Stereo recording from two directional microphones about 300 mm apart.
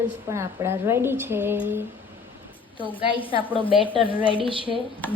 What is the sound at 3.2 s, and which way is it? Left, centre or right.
Speech, centre.